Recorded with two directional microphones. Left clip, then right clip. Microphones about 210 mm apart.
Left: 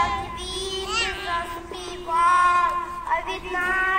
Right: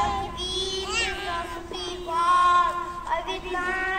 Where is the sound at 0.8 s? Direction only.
40° right (ahead or behind).